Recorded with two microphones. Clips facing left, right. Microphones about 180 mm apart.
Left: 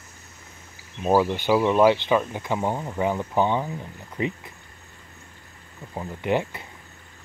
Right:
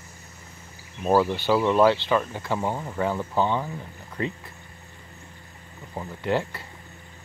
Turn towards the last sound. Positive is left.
turn(degrees=15)  # may be behind; listen again after turning